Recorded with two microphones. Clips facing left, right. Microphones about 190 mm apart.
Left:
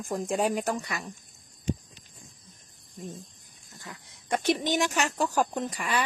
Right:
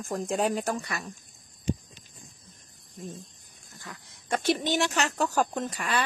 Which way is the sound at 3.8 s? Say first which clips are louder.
Even; 20° left (ahead or behind).